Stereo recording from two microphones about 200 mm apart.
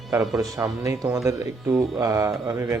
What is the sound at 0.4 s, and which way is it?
Speech, 15° right (ahead or behind).